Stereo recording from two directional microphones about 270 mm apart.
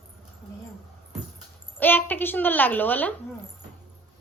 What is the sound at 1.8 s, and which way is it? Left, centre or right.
A child's voice, centre.